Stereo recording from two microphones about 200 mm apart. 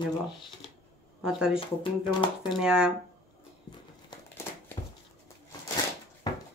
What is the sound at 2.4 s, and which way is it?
Speech, centre (ahead or behind).